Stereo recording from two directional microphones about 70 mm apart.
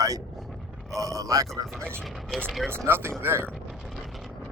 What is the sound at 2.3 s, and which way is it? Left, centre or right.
Speech, centre.